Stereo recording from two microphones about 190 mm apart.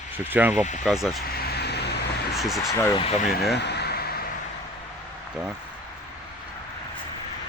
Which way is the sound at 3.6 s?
60° left (ahead or behind).